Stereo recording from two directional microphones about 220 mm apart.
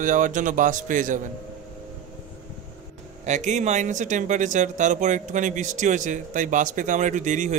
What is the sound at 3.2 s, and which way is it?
Speech, 30° right (ahead or behind).